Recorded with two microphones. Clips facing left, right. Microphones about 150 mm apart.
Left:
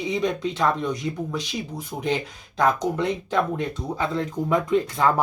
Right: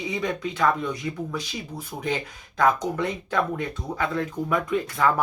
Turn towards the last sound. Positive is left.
turn(degrees=25)  # may be behind; listen again after turning